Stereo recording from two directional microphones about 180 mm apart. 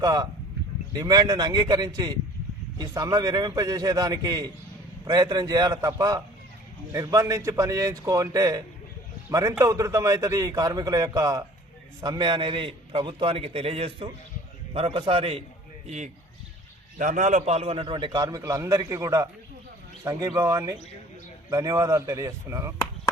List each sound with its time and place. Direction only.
0.0 s a man's voice: 20° right (ahead or behind)
17.0 s a man's voice: 45° right (ahead or behind); by 22.7 s 15° right (ahead or behind)